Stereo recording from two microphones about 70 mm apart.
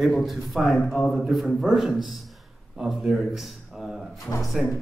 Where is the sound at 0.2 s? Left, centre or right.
Centre.